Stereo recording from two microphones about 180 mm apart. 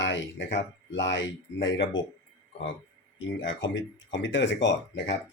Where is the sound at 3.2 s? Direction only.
90° left.